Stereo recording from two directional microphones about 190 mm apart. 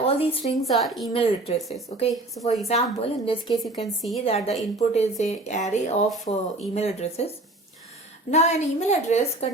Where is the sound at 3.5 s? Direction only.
Centre (ahead or behind).